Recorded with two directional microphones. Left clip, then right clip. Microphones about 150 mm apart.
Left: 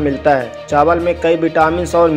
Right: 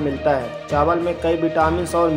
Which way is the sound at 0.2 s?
30° left (ahead or behind).